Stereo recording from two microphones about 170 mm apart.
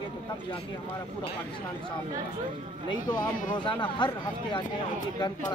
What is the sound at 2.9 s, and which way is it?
Speech, 25° left (ahead or behind).